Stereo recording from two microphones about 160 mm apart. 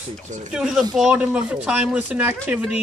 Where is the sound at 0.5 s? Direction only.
5° right (ahead or behind).